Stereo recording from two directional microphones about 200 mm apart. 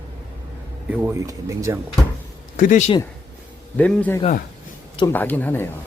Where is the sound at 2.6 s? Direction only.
40° left (ahead or behind).